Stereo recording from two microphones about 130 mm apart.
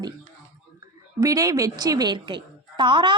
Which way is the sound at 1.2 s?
25° right (ahead or behind).